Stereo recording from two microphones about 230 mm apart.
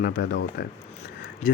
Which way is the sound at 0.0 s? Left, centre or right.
Left.